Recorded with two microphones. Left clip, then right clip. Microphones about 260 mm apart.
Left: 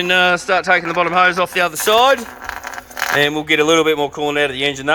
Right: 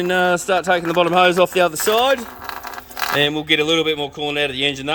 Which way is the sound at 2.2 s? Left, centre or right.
Right.